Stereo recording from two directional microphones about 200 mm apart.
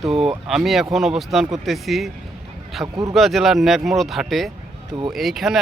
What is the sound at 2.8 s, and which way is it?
Speech, 15° right (ahead or behind).